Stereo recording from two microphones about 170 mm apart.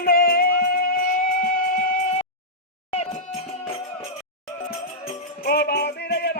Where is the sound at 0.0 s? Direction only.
60° left (ahead or behind).